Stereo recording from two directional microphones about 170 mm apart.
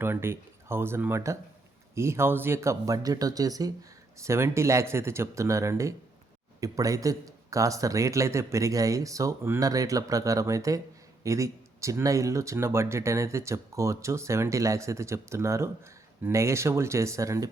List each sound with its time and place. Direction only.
0.0 s speech: 15° right (ahead or behind)